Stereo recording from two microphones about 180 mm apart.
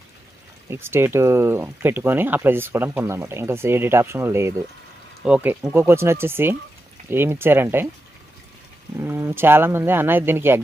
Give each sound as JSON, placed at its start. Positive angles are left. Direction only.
{"t": 0.7, "sound": "speech", "side_deg": -15}
{"t": 9.0, "sound": "speech", "side_deg": -15}